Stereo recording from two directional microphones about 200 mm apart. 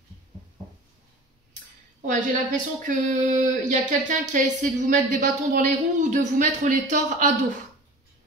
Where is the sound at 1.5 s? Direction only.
40° right (ahead or behind).